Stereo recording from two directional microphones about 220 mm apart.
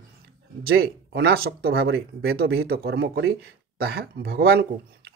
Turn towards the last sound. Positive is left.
turn(degrees=-45)  # may be behind; listen again after turning